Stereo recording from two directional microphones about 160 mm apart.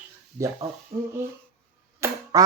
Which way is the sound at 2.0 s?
15° right (ahead or behind).